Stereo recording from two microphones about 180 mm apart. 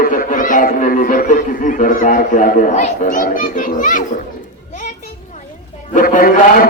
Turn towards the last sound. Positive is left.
turn(degrees=50)  # may be behind; listen again after turning